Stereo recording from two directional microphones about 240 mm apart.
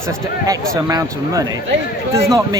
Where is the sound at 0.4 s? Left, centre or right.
Centre.